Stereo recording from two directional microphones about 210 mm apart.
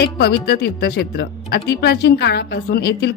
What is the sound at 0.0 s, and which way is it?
Speech, 50° left (ahead or behind).